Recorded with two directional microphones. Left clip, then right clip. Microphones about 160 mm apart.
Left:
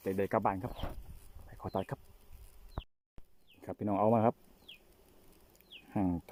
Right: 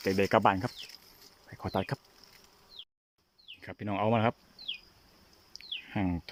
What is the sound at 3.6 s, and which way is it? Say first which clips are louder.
Speech: left 1 dB; 10° left (ahead or behind).